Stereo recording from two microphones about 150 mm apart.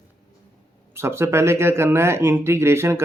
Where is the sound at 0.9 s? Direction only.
15° right (ahead or behind).